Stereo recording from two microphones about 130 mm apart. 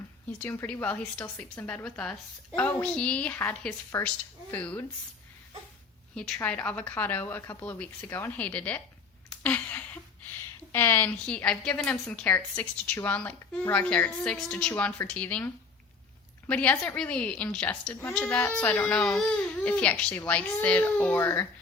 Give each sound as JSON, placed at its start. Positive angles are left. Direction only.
{"t": 0.4, "sound": "a woman's voice", "side_deg": 15}
{"t": 4.0, "sound": "a woman's voice", "side_deg": 20}
{"t": 6.1, "sound": "a woman's voice", "side_deg": 5}
{"t": 9.4, "sound": "a sound", "side_deg": 15}
{"t": 10.7, "sound": "a woman's voice", "side_deg": 20}
{"t": 11.3, "sound": "a woman's voice", "side_deg": 10}